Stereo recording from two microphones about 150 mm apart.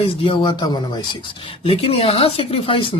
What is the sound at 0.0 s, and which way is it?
Speech, 35° left (ahead or behind).